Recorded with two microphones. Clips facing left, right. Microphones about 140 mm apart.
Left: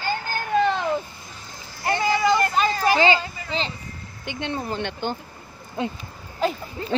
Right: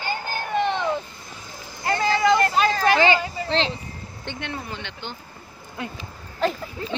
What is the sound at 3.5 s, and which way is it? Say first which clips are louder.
Speech: right 4 dB; centre (ahead or behind).